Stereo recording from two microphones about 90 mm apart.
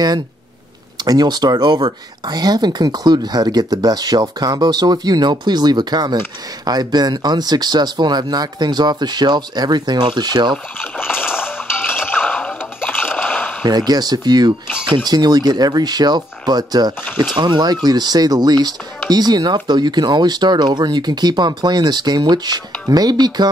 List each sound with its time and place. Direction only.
0.9 s speech: 50° right (ahead or behind)
10.8 s splash: 25° left (ahead or behind)
13.7 s speech: 50° right (ahead or behind)